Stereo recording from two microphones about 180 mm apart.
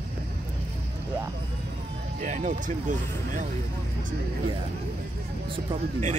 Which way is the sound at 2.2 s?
45° right (ahead or behind).